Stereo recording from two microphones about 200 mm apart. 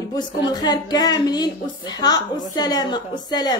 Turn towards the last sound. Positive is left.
turn(degrees=20)  # may be behind; listen again after turning